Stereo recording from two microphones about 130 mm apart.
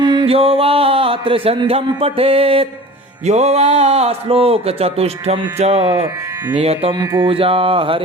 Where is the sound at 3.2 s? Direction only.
55° right (ahead or behind).